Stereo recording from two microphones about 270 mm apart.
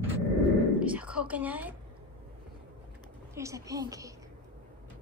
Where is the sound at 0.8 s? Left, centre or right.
Centre.